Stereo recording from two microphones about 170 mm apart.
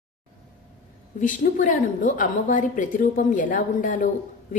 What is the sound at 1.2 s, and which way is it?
A woman's voice, 50° left (ahead or behind).